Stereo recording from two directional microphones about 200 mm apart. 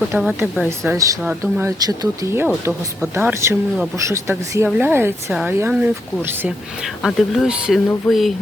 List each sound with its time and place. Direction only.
0.1 s speech: 10° right (ahead or behind)
1.8 s speech: 20° right (ahead or behind); by 8.3 s centre (ahead or behind)